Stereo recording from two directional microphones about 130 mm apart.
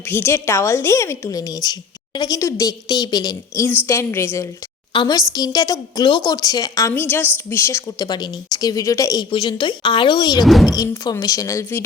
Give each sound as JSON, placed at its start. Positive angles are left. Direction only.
{"t": 0.1, "sound": "a woman's voice", "side_deg": 20}
{"t": 4.9, "sound": "a woman's voice", "side_deg": 30}
{"t": 6.9, "sound": "a woman's voice", "side_deg": 15}
{"t": 8.0, "sound": "a woman's voice", "side_deg": 30}
{"t": 9.3, "sound": "speech", "side_deg": 35}
{"t": 10.4, "sound": "speech", "side_deg": 0}
{"t": 10.8, "sound": "a woman's voice", "side_deg": 30}